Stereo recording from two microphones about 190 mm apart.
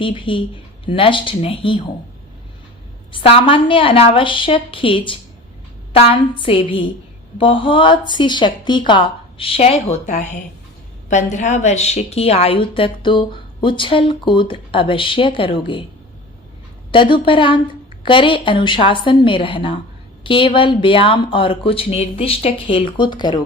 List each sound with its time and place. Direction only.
0.0 s a woman's voice: 25° left (ahead or behind)
3.1 s a woman's voice: 30° left (ahead or behind)
16.9 s a woman's voice: 25° left (ahead or behind)